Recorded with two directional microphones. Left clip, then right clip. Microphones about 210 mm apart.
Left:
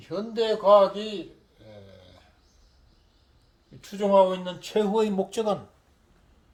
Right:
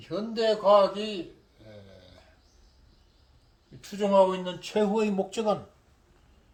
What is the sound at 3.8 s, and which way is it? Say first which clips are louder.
Speech: left 2 dB; 25° left (ahead or behind).